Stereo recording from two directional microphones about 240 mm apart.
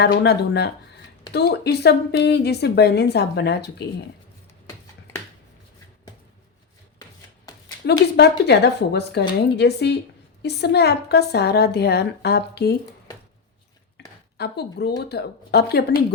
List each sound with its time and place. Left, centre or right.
0.0 s a woman's voice: left
7.9 s a woman's voice: left
14.0 s a sound: left
14.3 s a woman's voice: left